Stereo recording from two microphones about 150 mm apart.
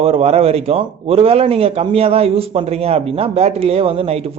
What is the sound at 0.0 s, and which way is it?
A man's voice, 40° right (ahead or behind).